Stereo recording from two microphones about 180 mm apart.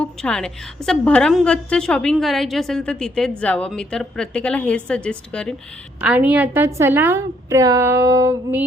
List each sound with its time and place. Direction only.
0.0 s a woman's voice: 5° left (ahead or behind)
6.0 s a woman's voice: 10° right (ahead or behind)